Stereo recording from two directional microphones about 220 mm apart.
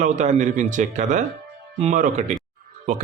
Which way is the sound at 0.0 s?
35° right (ahead or behind).